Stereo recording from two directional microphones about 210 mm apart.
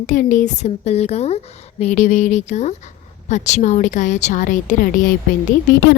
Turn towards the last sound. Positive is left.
turn(degrees=45)  # may be behind; listen again after turning